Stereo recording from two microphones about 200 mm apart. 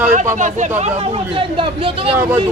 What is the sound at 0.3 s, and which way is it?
Speech, 35° right (ahead or behind).